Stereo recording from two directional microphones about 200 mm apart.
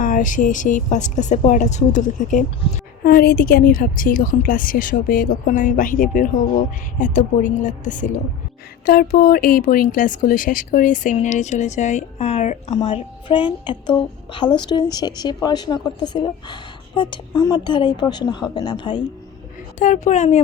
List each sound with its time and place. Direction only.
0.0 s a woman's voice: 40° left (ahead or behind); by 18.9 s 25° left (ahead or behind)
19.8 s speech: 35° left (ahead or behind)